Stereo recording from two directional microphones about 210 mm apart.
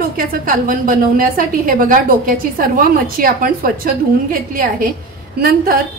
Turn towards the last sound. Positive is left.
turn(degrees=-45)  # may be behind; listen again after turning